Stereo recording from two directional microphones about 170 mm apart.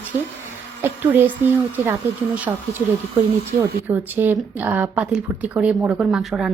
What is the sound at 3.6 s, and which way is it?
Speech, 10° right (ahead or behind).